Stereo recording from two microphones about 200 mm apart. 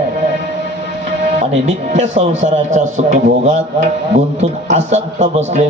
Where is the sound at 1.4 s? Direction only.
35° right (ahead or behind).